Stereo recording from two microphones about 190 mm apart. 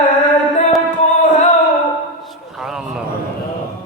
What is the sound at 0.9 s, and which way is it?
Music, 40° left (ahead or behind).